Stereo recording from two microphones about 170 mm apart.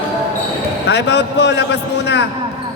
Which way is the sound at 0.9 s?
85° left.